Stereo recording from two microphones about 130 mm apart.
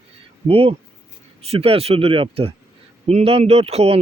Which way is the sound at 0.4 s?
45° right (ahead or behind).